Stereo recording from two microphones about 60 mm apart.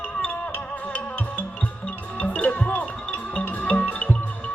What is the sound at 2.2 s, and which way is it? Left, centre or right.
Music, left.